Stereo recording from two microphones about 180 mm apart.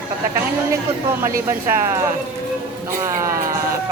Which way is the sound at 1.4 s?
15° right (ahead or behind).